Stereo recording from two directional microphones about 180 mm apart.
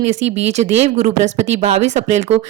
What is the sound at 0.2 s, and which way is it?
Speech, 90° right.